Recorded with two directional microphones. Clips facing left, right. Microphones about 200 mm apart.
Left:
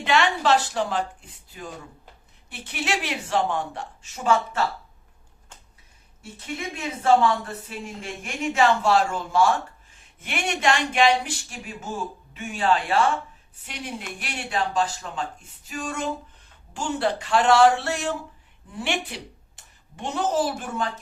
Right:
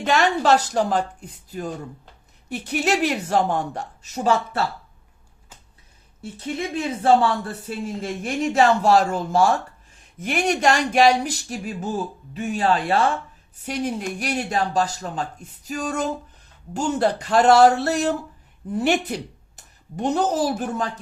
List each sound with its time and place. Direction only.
0.0 s speech: 40° right (ahead or behind)
6.4 s speech: 35° right (ahead or behind)